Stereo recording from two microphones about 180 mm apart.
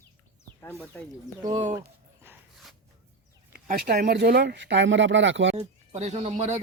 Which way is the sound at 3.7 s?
55° right (ahead or behind).